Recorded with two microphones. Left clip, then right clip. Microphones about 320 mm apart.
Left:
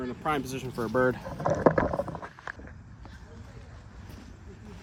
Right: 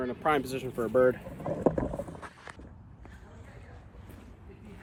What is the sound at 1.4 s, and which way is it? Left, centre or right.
Rowboat, right.